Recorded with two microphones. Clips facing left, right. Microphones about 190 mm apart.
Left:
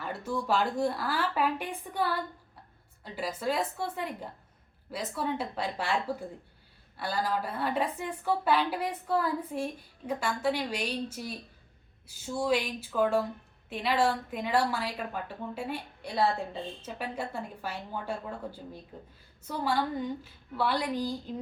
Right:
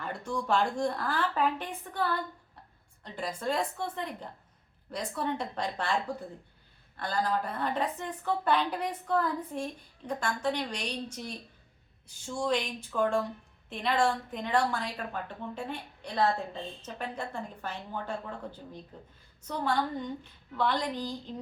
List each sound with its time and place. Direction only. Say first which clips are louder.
0.0 s a woman's voice: left 1 dB; 5° left (ahead or behind)